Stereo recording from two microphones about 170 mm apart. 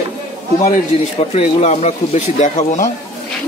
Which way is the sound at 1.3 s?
40° left (ahead or behind).